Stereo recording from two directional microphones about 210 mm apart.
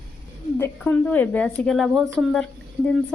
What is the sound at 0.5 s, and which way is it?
A woman's voice, 10° left (ahead or behind).